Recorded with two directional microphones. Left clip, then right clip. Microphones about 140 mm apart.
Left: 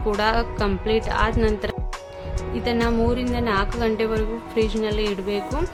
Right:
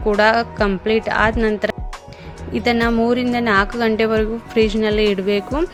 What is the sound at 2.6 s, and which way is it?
A woman's voice, 50° right (ahead or behind).